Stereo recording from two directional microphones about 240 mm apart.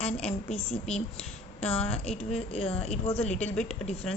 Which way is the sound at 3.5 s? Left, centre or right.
Centre.